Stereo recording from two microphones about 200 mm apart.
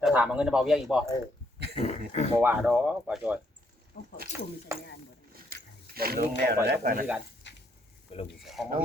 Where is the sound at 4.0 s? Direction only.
45° left (ahead or behind).